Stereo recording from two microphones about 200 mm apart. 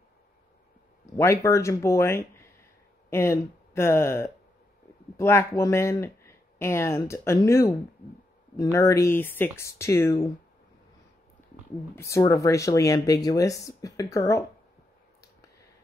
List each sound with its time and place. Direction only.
1.1 s speech: 15° left (ahead or behind)
8.7 s speech: 15° left (ahead or behind)
11.9 s speech: 15° left (ahead or behind)